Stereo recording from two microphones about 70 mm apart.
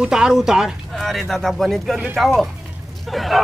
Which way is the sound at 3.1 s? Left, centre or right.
Centre.